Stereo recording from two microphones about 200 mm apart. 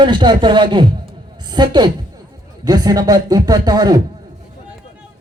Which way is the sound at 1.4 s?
20° right (ahead or behind).